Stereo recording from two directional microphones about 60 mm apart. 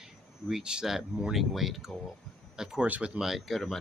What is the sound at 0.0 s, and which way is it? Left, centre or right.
Speech, centre.